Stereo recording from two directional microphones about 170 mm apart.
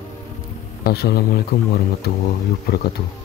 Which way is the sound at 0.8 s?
65° left (ahead or behind).